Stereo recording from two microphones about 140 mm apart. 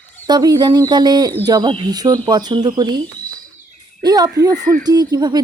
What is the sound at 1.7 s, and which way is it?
Speech, 30° right (ahead or behind).